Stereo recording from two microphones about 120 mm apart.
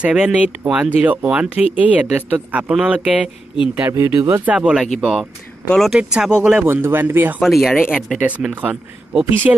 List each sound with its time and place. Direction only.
0.0 s speech: 10° right (ahead or behind)
6.6 s speech: 20° right (ahead or behind)
7.4 s speech: centre (ahead or behind)